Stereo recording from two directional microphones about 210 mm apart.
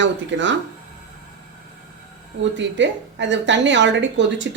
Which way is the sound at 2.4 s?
60° right (ahead or behind).